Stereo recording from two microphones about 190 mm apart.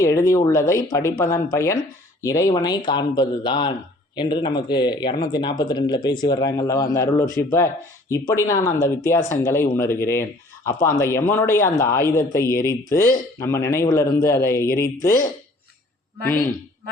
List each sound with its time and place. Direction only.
0.0 s speech: 15° left (ahead or behind)